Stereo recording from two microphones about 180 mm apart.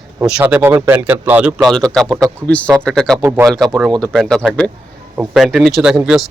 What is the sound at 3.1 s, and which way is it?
Speech, 15° right (ahead or behind).